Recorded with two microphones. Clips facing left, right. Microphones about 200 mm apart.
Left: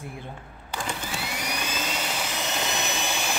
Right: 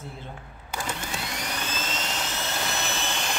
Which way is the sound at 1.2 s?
10° left (ahead or behind).